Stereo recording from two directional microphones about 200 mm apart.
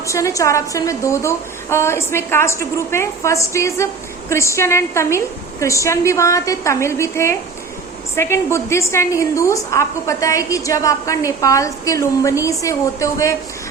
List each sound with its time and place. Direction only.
0.0 s a woman's voice: 15° left (ahead or behind)